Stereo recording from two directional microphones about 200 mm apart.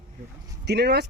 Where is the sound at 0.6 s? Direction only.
55° right (ahead or behind).